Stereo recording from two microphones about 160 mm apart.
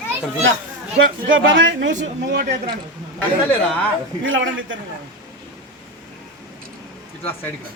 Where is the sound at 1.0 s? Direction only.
80° right.